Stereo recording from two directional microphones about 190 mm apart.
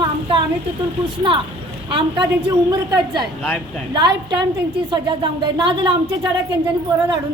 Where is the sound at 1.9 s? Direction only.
25° right (ahead or behind).